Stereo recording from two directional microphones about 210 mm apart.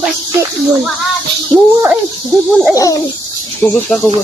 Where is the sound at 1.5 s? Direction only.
5° right (ahead or behind).